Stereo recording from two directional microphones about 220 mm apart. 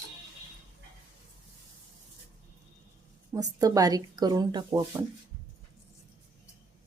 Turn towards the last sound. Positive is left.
turn(degrees=-15)  # may be behind; listen again after turning